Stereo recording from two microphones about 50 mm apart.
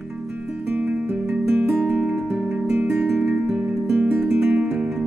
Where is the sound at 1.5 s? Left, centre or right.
Right.